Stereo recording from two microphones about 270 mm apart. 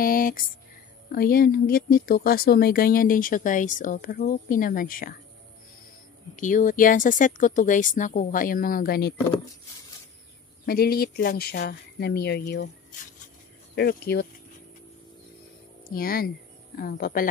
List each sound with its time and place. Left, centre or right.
0.0 s a sound: left
1.1 s speech: left
6.3 s speech: left
10.6 s speech: left
13.7 s speech: left
15.9 s speech: left